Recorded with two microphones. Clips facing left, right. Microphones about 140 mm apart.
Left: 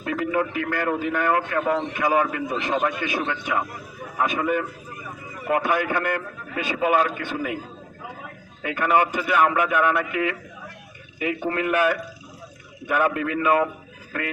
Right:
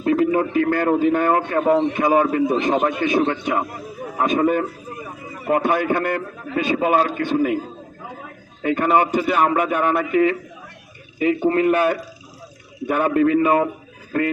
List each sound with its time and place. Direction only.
0.0 s a sound: 30° right (ahead or behind)
0.5 s a man's voice: 30° right (ahead or behind)
8.6 s a man's voice: 30° right (ahead or behind)